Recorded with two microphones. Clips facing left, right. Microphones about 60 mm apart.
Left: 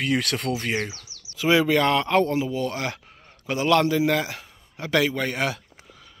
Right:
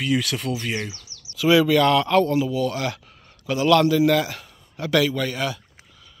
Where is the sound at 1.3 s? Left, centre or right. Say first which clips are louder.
Right 3 dB; left.